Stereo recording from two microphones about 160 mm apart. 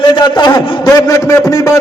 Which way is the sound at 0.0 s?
25° left (ahead or behind).